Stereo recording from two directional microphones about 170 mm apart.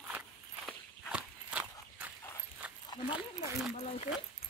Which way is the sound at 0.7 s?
5° right (ahead or behind).